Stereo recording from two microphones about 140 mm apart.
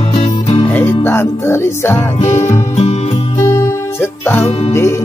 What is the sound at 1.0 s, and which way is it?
Speech, 15° left (ahead or behind).